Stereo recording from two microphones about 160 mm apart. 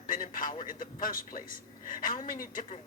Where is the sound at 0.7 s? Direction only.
60° left (ahead or behind).